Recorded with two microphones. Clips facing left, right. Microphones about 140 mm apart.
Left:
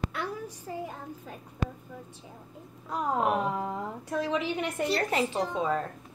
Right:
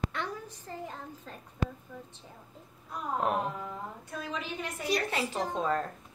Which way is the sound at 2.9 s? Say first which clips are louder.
Left 4 dB; 90° left.